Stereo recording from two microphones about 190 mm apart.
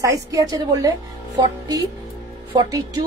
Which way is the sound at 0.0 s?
15° right (ahead or behind).